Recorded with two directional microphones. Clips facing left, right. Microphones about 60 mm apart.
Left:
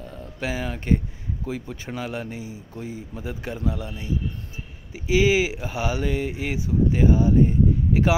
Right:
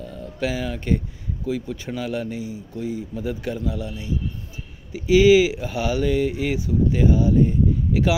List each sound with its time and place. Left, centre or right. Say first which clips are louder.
0.0 s a man's voice: right 4 dB; left
4.9 s speech: right 6 dB; left